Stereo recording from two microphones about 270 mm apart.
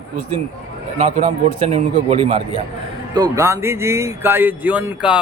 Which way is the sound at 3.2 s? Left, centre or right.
Centre.